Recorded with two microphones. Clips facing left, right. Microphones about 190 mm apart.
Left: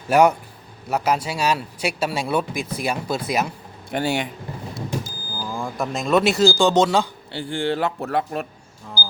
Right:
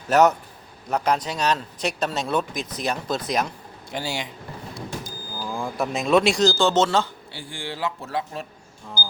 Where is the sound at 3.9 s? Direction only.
55° left (ahead or behind).